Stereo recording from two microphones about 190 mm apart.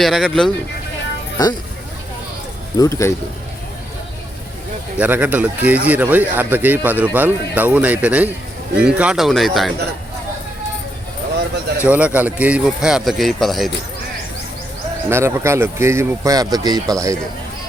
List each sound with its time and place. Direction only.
0.0 s speech: centre (ahead or behind)
2.7 s speech: 15° left (ahead or behind)
4.9 s speech: 10° right (ahead or behind)
11.8 s speech: 5° right (ahead or behind)
15.1 s speech: 15° right (ahead or behind)